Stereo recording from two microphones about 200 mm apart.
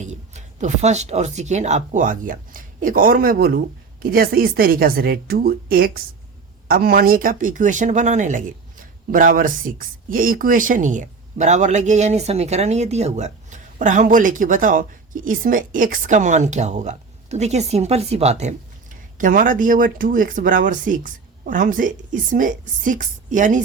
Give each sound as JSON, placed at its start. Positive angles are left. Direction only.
{"t": 0.0, "sound": "speech", "side_deg": -35}